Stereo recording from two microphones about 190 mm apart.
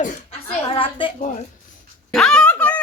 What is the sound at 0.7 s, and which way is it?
Speech, 25° left (ahead or behind).